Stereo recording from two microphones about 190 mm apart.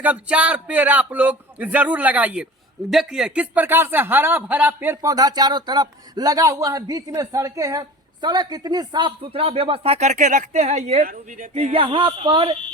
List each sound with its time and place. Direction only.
0.0 s a man's voice: 5° right (ahead or behind); by 12.5 s 25° right (ahead or behind)